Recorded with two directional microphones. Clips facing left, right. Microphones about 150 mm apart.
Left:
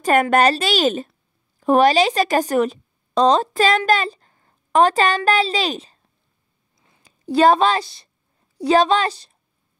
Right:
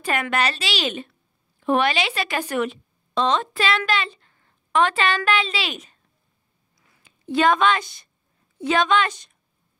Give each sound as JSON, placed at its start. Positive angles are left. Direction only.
{"t": 0.0, "sound": "a woman's voice", "side_deg": 45}
{"t": 7.0, "sound": "a woman's voice", "side_deg": 35}